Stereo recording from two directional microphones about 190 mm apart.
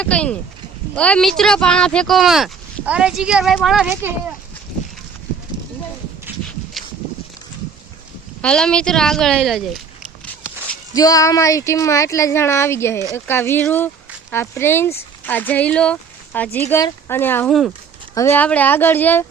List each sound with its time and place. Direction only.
0.0 s speech: 5° left (ahead or behind)
6.8 s a sound: centre (ahead or behind)
8.4 s speech: 5° left (ahead or behind)
10.9 s speech: 20° left (ahead or behind)